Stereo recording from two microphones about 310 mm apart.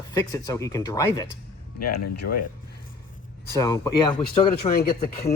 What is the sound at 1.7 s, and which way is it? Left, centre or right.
Speech, left.